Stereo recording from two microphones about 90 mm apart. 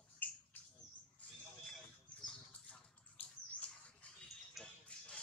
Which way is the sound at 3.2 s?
10° left (ahead or behind).